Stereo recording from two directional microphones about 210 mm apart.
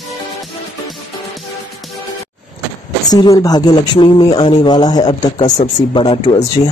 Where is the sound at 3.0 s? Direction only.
15° left (ahead or behind).